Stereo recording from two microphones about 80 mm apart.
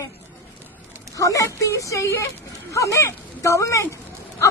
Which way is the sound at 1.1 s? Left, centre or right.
Left.